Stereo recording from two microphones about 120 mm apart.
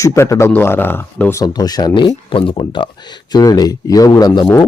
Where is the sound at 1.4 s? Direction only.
35° left (ahead or behind).